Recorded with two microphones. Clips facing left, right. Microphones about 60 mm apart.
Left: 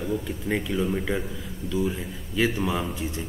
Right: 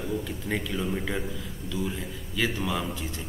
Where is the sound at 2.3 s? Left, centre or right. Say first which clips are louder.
Left 4 dB; centre.